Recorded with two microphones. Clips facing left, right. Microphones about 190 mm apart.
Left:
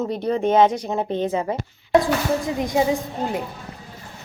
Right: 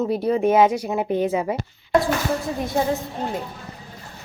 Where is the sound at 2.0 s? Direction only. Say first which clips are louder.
Left 1 dB; 15° left (ahead or behind).